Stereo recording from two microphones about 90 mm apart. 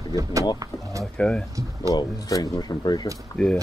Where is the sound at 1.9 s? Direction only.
50° left (ahead or behind).